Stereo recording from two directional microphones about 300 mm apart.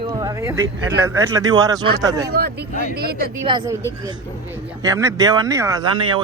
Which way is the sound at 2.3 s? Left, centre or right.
Right.